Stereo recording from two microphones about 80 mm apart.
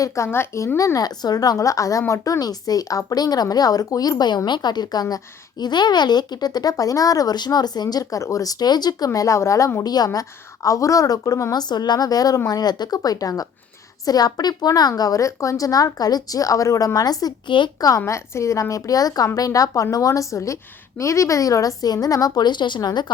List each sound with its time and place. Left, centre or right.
0.3 s speech: left
0.9 s a woman's voice: left
2.4 s a woman's voice: left
9.1 s speech: left
9.8 s a woman's voice: left
11.5 s a woman's voice: left
18.0 s a woman's voice: left